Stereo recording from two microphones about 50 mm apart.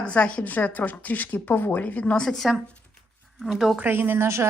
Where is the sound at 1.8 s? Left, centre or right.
Left.